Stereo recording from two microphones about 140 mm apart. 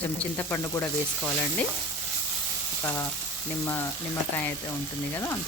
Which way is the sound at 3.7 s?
15° left (ahead or behind).